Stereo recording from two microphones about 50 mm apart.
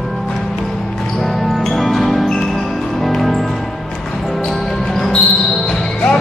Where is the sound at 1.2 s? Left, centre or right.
Centre.